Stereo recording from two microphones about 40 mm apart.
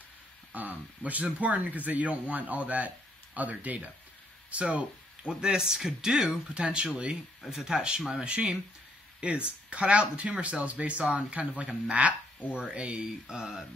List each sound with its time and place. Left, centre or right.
0.5 s speech: right
5.2 s speech: right
6.2 s speech: right
13.3 s speech: centre